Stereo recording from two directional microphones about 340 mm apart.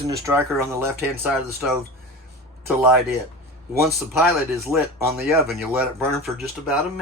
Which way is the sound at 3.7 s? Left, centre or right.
Centre.